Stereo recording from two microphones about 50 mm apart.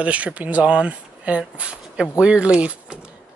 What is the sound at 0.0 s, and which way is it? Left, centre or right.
Speech, right.